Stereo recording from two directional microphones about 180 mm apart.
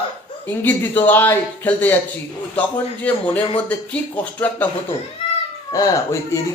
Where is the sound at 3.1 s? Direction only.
10° left (ahead or behind).